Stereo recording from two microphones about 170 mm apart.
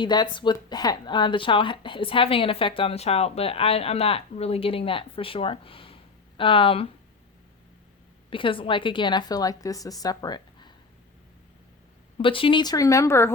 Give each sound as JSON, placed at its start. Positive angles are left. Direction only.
{"t": 0.0, "sound": "speech", "side_deg": 25}
{"t": 8.3, "sound": "a woman's voice", "side_deg": 30}
{"t": 12.1, "sound": "a woman's voice", "side_deg": 30}